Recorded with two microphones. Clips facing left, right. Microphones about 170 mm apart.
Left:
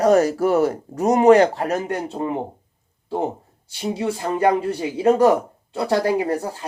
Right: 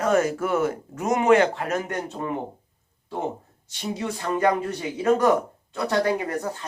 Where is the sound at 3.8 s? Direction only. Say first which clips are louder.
Left 5 dB; 30° left (ahead or behind).